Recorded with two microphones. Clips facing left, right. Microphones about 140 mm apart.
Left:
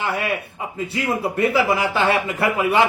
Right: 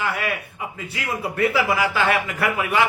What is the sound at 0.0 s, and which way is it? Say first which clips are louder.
Speech: left 2 dB; 25° left (ahead or behind).